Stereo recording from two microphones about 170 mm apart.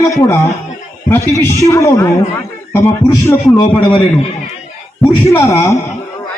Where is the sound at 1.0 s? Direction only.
15° left (ahead or behind).